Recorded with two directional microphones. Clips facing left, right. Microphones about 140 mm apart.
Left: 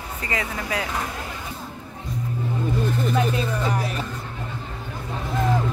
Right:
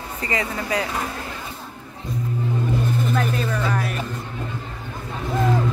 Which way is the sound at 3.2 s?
15° left (ahead or behind).